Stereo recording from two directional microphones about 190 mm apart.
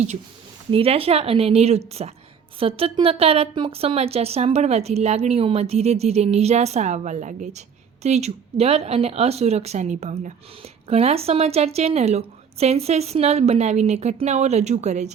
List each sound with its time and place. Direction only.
0.7 s a woman's voice: 30° right (ahead or behind)